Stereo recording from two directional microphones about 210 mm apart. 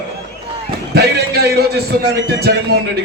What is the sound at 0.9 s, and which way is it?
Speech, 50° right (ahead or behind).